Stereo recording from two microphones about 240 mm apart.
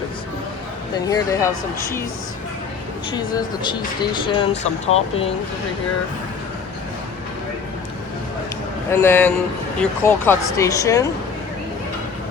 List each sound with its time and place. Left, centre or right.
0.9 s speech: centre
3.2 s speech: centre
8.9 s speech: centre